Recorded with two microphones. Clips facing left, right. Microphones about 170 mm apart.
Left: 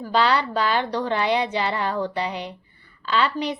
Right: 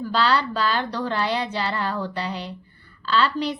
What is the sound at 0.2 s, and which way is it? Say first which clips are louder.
A woman's voice: left 1 dB; 20° left (ahead or behind).